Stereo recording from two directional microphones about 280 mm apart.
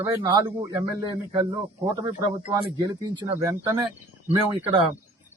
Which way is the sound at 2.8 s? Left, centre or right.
Centre.